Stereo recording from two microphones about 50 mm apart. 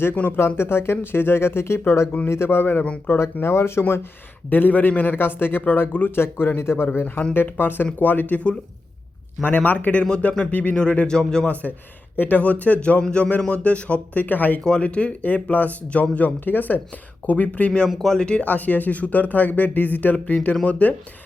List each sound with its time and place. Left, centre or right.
0.1 s speech: left
0.3 s a man's voice: left
4.4 s a man's voice: left
7.3 s a man's voice: left
9.4 s speech: left
10.5 s speech: left
10.8 s speech: left
11.6 s speech: left
12.1 s speech: left
14.6 s speech: centre
17.8 s speech: centre
18.2 s speech: left
18.4 s speech: left